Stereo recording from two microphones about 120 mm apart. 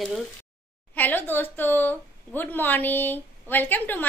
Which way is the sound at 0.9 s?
15° left (ahead or behind).